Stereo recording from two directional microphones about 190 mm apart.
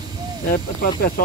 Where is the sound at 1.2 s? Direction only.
55° left (ahead or behind).